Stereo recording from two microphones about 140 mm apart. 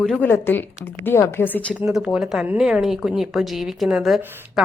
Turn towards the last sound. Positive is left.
turn(degrees=0)  # may be behind; listen again after turning